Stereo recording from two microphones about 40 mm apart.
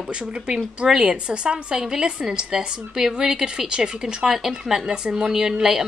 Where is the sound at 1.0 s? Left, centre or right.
Right.